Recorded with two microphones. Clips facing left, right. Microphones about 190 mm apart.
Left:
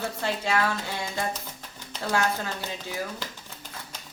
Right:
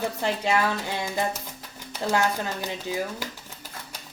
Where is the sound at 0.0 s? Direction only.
20° right (ahead or behind).